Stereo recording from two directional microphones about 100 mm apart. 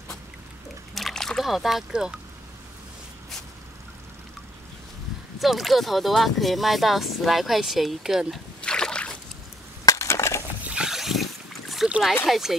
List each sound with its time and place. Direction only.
0.9 s trickle: 5° left (ahead or behind)
5.4 s speech: centre (ahead or behind)
8.5 s a sound: 10° left (ahead or behind)
9.8 s crushing: 30° left (ahead or behind)
10.7 s boat: 5° right (ahead or behind)
11.9 s speech: 5° right (ahead or behind)